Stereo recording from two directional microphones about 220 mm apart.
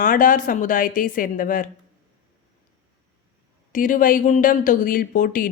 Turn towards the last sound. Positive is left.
turn(degrees=40)  # may be behind; listen again after turning